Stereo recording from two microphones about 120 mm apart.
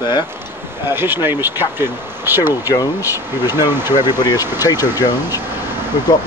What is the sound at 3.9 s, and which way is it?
Speech, 35° left (ahead or behind).